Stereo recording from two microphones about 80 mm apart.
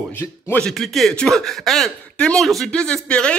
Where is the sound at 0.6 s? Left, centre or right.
Centre.